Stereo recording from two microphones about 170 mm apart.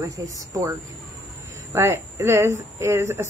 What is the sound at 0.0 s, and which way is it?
Speech, 20° right (ahead or behind).